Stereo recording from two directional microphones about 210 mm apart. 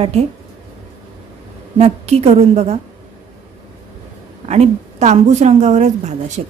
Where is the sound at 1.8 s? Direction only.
30° right (ahead or behind).